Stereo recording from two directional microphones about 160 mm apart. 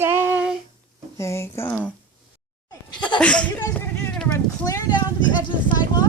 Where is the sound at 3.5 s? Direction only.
20° left (ahead or behind).